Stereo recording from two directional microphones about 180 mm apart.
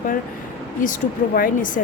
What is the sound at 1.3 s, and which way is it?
Speech, 50° left (ahead or behind).